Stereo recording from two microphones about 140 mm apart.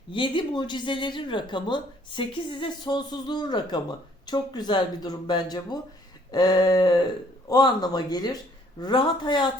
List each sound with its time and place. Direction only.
0.1 s speech: 35° left (ahead or behind)